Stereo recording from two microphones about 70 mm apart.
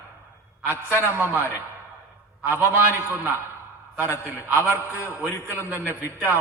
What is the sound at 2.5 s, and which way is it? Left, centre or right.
A man's voice, right.